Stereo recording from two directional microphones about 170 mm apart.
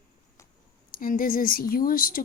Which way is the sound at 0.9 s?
55° left (ahead or behind).